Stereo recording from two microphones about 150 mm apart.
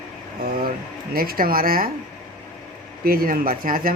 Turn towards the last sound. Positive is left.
turn(degrees=-70)  # may be behind; listen again after turning